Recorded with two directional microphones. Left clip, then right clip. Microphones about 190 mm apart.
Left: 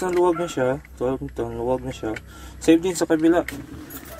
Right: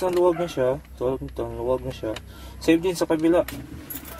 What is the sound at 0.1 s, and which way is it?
Speech, 30° left (ahead or behind).